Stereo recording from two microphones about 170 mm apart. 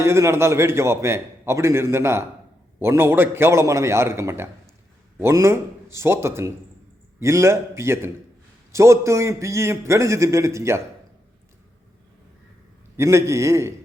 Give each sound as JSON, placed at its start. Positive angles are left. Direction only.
{"t": 0.0, "sound": "a man's voice", "side_deg": -15}
{"t": 13.0, "sound": "a man's voice", "side_deg": -15}